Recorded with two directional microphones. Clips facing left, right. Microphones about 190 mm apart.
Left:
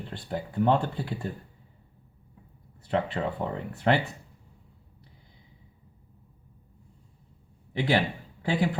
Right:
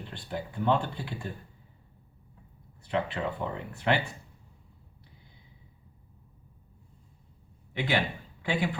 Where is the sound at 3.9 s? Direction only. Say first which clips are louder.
Left 3 dB; 40° left (ahead or behind).